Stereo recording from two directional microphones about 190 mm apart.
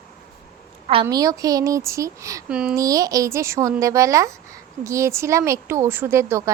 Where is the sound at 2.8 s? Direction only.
20° right (ahead or behind).